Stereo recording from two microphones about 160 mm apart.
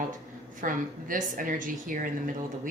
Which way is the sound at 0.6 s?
55° right (ahead or behind).